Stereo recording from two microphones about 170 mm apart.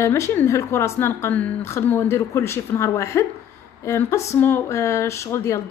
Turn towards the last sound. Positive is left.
turn(degrees=15)  # may be behind; listen again after turning